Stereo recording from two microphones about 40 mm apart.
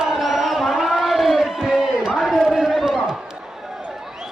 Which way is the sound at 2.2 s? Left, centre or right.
Centre.